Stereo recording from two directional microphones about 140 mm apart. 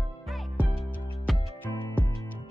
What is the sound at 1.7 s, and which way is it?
Music, 20° left (ahead or behind).